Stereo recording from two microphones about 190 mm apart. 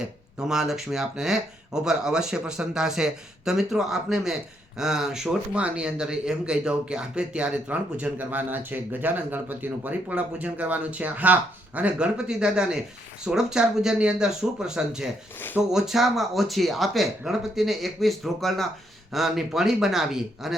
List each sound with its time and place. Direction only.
0.3 s speech: 5° right (ahead or behind)